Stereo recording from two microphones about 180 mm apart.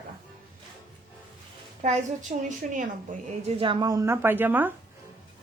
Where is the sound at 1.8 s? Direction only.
40° right (ahead or behind).